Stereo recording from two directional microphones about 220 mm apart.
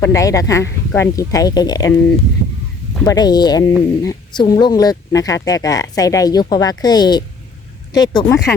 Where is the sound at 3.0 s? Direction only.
20° left (ahead or behind).